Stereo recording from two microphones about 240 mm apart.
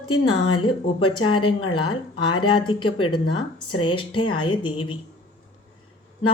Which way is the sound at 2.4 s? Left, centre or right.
Centre.